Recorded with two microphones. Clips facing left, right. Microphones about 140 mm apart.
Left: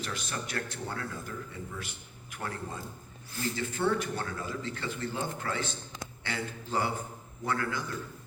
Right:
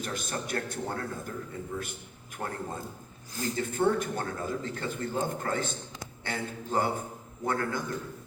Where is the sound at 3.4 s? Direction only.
45° right (ahead or behind).